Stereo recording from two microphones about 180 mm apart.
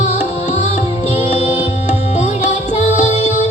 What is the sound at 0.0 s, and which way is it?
Music, 45° left (ahead or behind).